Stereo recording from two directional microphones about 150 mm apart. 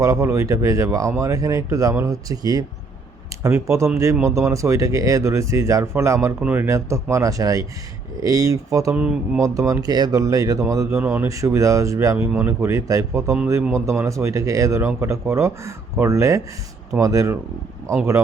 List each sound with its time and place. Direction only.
0.0 s speech: 20° right (ahead or behind)
8.9 s speech: 5° right (ahead or behind)
9.4 s speech: 20° right (ahead or behind)